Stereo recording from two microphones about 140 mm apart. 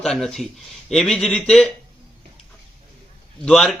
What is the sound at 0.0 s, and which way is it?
Speech, 5° left (ahead or behind).